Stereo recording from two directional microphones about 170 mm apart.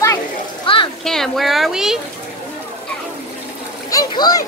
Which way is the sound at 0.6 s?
30° left (ahead or behind).